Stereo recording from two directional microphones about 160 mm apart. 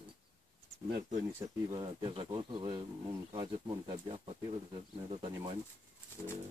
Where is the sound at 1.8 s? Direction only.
30° right (ahead or behind).